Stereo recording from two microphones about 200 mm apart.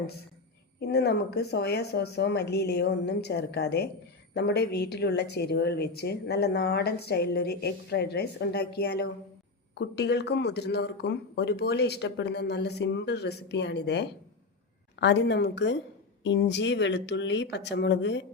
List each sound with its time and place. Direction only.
0.8 s a woman's voice: 55° left (ahead or behind)